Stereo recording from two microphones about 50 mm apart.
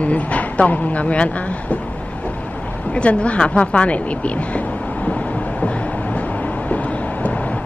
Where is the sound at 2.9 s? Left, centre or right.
Left.